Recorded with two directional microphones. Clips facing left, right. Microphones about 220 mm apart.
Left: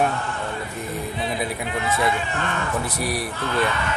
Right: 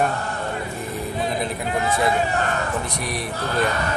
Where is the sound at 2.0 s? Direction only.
40° right (ahead or behind).